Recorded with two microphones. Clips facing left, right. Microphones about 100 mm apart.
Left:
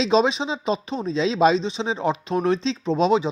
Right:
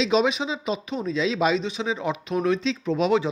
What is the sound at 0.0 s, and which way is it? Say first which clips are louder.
Speech: left 2 dB; 30° left (ahead or behind).